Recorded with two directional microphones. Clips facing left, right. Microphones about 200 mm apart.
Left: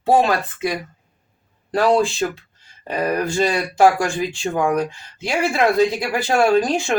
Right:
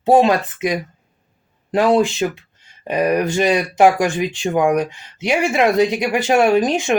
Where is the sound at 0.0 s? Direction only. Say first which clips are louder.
Right 3 dB; 20° right (ahead or behind).